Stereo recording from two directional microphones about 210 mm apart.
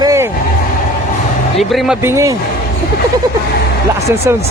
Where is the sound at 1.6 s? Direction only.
Centre (ahead or behind).